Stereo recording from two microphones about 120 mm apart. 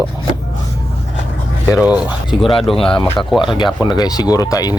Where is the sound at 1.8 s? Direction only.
10° right (ahead or behind).